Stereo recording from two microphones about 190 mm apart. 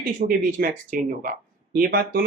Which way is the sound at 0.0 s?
45° right (ahead or behind).